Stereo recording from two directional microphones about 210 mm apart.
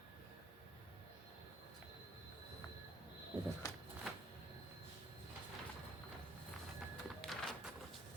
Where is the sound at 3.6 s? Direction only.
15° left (ahead or behind).